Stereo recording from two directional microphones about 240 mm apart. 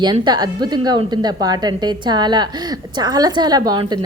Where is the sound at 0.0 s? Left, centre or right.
Centre.